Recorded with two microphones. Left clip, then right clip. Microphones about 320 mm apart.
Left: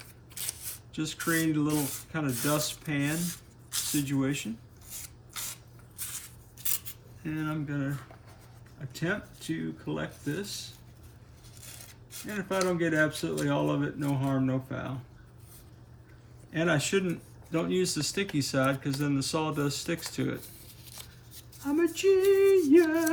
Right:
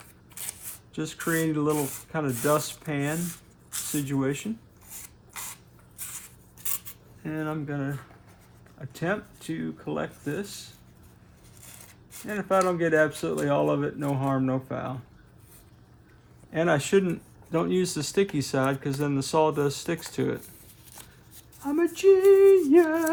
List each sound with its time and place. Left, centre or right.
0.0 s shuffling cards: centre
0.9 s speech: right
3.2 s rub: centre
3.9 s speech: centre
5.3 s spray: centre
6.8 s speech: right
12.2 s speech: centre
16.5 s speech: right
21.6 s speech: right